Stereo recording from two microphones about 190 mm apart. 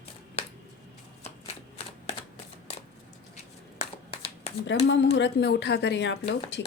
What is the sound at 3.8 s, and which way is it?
Clapping, 30° left (ahead or behind).